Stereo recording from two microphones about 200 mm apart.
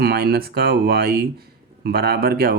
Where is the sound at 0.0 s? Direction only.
50° right (ahead or behind).